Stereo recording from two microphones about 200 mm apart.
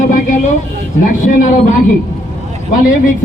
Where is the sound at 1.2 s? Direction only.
40° left (ahead or behind).